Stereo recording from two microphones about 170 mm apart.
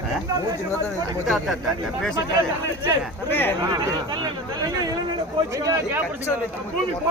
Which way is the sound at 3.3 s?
10° left (ahead or behind).